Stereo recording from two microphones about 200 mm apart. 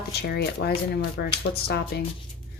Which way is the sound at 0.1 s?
55° left (ahead or behind).